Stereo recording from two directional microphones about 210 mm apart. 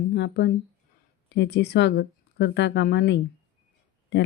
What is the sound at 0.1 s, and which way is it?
A woman's voice, 50° left (ahead or behind).